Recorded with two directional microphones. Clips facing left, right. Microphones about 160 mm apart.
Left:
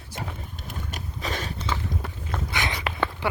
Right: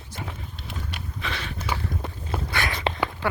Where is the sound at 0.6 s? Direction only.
40° left (ahead or behind).